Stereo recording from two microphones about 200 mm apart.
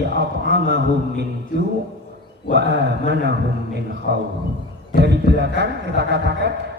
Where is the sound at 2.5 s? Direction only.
55° right (ahead or behind).